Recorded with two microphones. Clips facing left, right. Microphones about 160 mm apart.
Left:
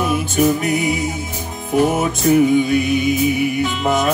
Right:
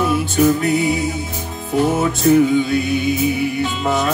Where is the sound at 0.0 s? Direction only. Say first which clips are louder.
Right 1 dB; 15° left (ahead or behind).